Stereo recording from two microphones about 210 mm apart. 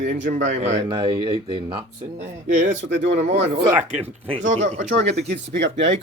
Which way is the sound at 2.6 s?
55° right (ahead or behind).